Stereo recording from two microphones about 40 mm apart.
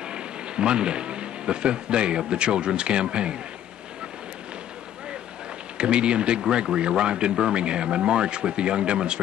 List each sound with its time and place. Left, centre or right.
0.0 s speech: right
5.8 s speech: right